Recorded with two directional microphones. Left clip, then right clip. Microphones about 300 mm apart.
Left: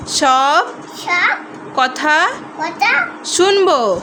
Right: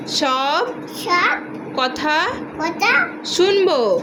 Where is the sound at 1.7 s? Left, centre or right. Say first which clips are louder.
Left 5 dB; left.